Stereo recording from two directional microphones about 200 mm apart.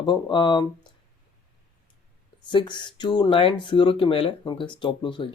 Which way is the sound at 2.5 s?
25° left (ahead or behind).